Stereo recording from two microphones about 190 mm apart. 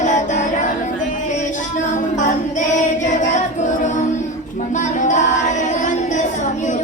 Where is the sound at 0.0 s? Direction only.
40° left (ahead or behind).